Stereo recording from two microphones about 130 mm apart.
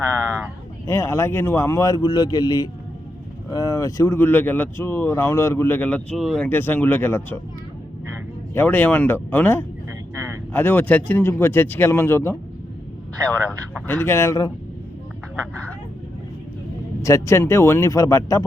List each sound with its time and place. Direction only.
0.9 s a man's voice: 20° left (ahead or behind); by 6.5 s 5° left (ahead or behind)
6.5 s speech: 15° left (ahead or behind)
8.5 s speech: 15° left (ahead or behind)
13.8 s a man's voice: 20° left (ahead or behind)
17.0 s a man's voice: 25° left (ahead or behind)